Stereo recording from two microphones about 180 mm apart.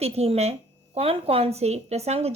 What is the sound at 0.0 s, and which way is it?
A woman's voice, 35° right (ahead or behind).